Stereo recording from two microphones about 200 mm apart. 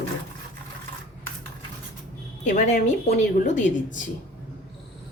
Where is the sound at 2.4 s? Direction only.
35° left (ahead or behind).